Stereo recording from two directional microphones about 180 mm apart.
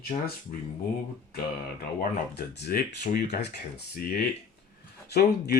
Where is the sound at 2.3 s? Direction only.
65° left (ahead or behind).